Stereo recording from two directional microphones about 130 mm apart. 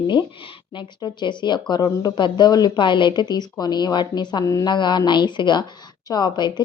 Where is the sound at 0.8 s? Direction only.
35° left (ahead or behind).